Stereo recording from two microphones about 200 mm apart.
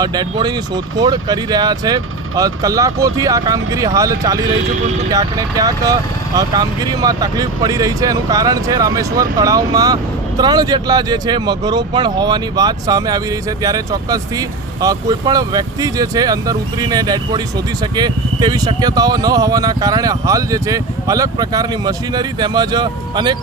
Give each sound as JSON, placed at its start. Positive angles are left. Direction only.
{"t": 0.0, "sound": "speech", "side_deg": -20}